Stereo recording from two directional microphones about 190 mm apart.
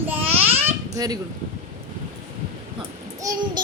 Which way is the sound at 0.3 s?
10° right (ahead or behind).